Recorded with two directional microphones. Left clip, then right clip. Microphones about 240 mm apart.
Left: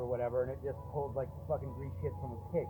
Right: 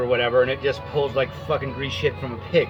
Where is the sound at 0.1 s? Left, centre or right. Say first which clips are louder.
Right 16 dB; right.